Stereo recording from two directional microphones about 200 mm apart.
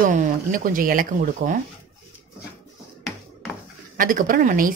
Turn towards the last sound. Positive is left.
turn(degrees=-45)  # may be behind; listen again after turning